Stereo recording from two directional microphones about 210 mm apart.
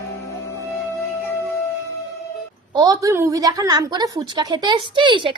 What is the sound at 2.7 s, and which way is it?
A woman's voice, 15° right (ahead or behind).